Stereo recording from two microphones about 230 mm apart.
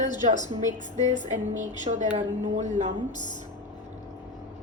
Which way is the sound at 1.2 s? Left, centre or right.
Right.